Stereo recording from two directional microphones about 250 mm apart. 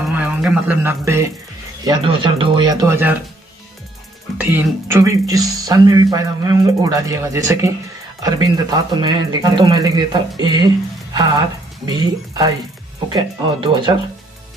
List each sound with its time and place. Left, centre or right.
0.0 s speech: centre
4.4 s speech: centre